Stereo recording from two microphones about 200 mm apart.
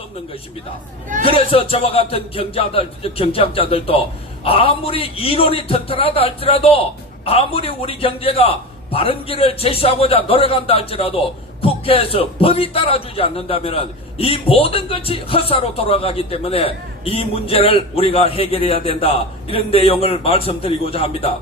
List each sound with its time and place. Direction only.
1.2 s speech: 30° left (ahead or behind)